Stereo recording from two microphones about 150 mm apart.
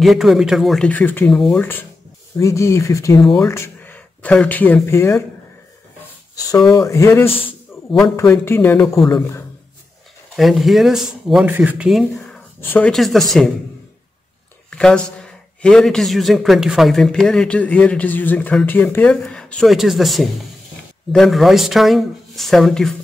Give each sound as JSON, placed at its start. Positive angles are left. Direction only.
{"t": 0.0, "sound": "a man's voice", "side_deg": 0}
{"t": 3.2, "sound": "a man's voice", "side_deg": 0}
{"t": 3.4, "sound": "speech", "side_deg": 15}
{"t": 6.7, "sound": "speech", "side_deg": 20}
{"t": 7.2, "sound": "a sound", "side_deg": 40}
{"t": 8.0, "sound": "speech", "side_deg": 15}
{"t": 8.8, "sound": "a man's voice", "side_deg": 0}
{"t": 10.3, "sound": "a man's voice", "side_deg": 0}
{"t": 12.5, "sound": "speech", "side_deg": 15}
{"t": 12.9, "sound": "a man's voice", "side_deg": 0}
{"t": 14.7, "sound": "a man's voice", "side_deg": 5}